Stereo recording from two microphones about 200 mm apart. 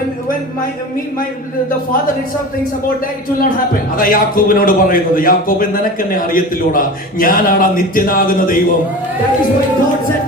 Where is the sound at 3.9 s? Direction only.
45° left (ahead or behind).